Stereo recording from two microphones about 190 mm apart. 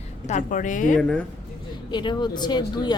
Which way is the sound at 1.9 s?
25° left (ahead or behind).